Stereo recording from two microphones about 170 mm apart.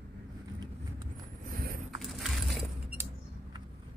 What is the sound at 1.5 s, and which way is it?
Vehicle, 60° right (ahead or behind).